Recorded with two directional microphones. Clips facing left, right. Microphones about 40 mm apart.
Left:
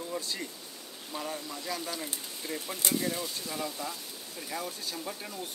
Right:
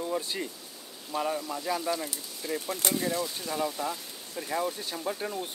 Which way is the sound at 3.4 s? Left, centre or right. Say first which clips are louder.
Right 5 dB; centre.